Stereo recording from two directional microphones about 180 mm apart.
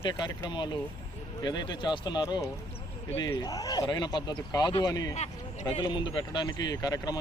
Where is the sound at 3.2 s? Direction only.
20° left (ahead or behind).